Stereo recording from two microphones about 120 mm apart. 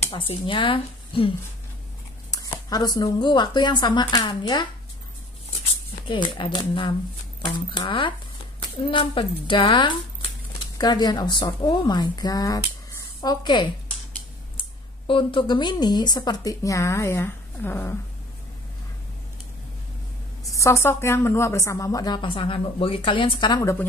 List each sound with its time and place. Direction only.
0.1 s speech: 50° left (ahead or behind)
2.3 s speech: 35° left (ahead or behind)
6.0 s a woman's voice: 40° left (ahead or behind); by 17.9 s 20° left (ahead or behind)
20.5 s a woman's voice: 25° left (ahead or behind); by 23.6 s 45° left (ahead or behind)
23.6 s a woman's voice: 25° left (ahead or behind)